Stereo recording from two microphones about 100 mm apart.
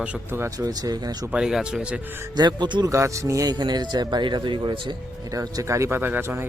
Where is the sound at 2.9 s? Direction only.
30° right (ahead or behind); by 4.9 s 50° right (ahead or behind).